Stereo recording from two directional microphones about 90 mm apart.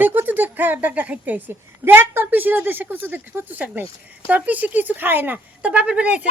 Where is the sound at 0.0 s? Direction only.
20° right (ahead or behind).